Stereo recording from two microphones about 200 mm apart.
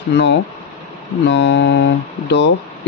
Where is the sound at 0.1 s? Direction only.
60° left (ahead or behind).